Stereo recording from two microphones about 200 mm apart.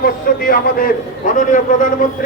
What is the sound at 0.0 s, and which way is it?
A man's voice, 45° left (ahead or behind).